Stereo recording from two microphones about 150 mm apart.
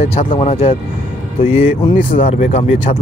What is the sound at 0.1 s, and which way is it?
Speech, 40° left (ahead or behind).